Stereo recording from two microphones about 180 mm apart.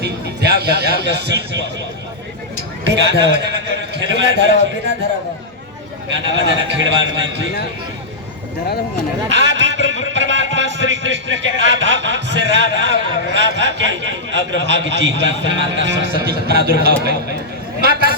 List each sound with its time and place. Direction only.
0.0 s a man's voice: 65° right (ahead or behind)
2.8 s a man's voice: 75° right (ahead or behind)
4.0 s a man's voice: 85° right
6.1 s a man's voice: 90° right
9.3 s a man's voice: 90° right
16.5 s speech: 60° right (ahead or behind)
17.7 s a sound: 60° right (ahead or behind)